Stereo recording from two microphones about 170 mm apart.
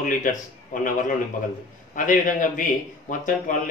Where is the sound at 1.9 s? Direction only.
50° left (ahead or behind).